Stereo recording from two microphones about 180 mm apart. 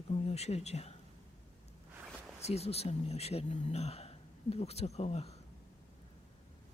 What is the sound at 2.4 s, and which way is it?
Speech, 35° left (ahead or behind).